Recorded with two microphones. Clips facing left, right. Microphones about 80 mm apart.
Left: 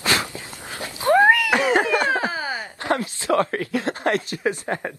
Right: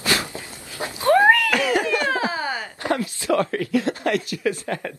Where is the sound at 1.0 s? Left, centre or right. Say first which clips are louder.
Even; centre.